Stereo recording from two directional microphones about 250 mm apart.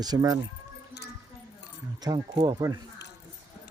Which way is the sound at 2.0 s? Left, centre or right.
Centre.